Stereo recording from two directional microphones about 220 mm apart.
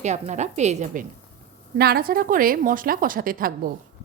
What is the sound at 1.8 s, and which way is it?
Speech, 45° right (ahead or behind).